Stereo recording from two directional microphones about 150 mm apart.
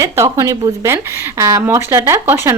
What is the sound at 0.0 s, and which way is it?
Speech, 20° right (ahead or behind).